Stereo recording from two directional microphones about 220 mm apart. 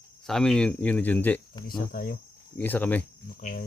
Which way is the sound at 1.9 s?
40° left (ahead or behind).